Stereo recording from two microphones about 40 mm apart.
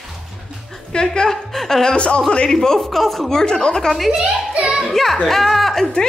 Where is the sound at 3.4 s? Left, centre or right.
Centre.